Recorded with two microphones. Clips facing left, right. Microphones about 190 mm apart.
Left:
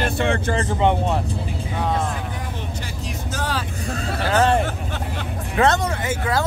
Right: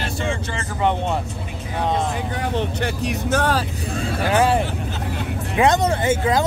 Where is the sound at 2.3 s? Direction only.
65° right (ahead or behind).